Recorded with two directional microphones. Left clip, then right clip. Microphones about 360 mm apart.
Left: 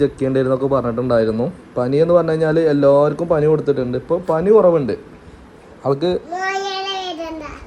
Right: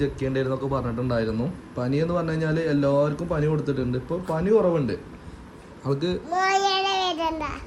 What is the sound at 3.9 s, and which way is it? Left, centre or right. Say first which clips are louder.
Speech: left 10 dB; left.